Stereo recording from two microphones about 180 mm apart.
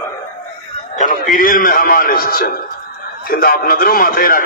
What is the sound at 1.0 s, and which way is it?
A man's voice, 50° left (ahead or behind).